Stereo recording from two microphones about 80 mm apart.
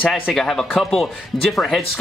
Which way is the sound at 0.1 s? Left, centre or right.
Centre.